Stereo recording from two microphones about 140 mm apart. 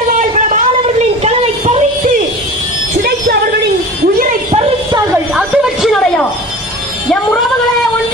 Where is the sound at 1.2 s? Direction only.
50° right (ahead or behind).